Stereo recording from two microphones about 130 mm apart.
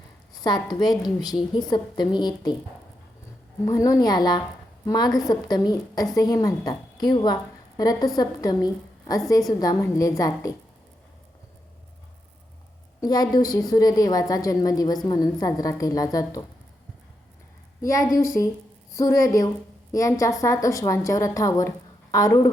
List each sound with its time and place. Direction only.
0.3 s a woman's voice: 30° left (ahead or behind)
3.7 s a woman's voice: 25° left (ahead or behind)
13.0 s a woman's voice: 30° left (ahead or behind)
17.8 s a woman's voice: 25° left (ahead or behind)